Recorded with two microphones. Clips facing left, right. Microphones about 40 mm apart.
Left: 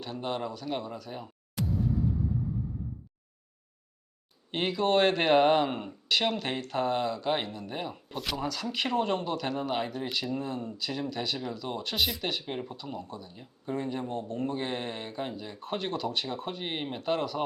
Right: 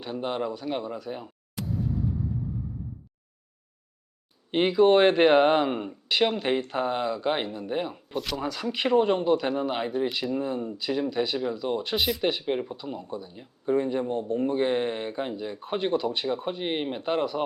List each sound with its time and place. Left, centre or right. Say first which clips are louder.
0.0 s speech: right 4 dB; centre
1.6 s music: left 1 dB; centre
4.5 s speech: right 7 dB; centre
7.9 s speech: right 3 dB; centre
8.4 s speech: right 2 dB; centre